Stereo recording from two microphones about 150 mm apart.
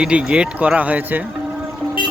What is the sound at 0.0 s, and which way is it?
Speech, 5° right (ahead or behind).